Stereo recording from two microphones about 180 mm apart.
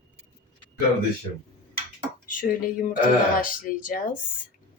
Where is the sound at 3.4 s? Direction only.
50° left (ahead or behind).